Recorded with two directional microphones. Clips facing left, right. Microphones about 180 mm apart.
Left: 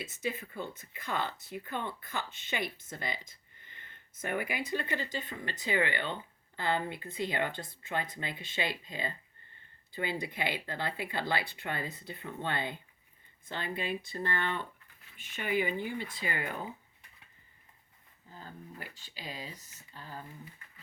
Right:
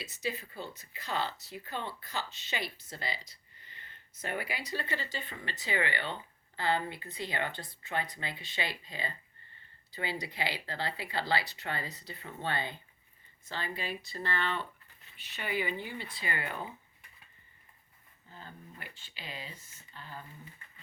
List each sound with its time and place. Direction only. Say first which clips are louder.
0.0 s speech: left 1 dB; 50° left (ahead or behind)
4.4 s speech: left 4 dB; 15° left (ahead or behind)
4.9 s speech: left 3 dB; 50° left (ahead or behind)
14.4 s speech: even; 15° left (ahead or behind)
15.1 s speech: left 4 dB; 50° left (ahead or behind)
18.8 s speech: left 3 dB; 40° left (ahead or behind)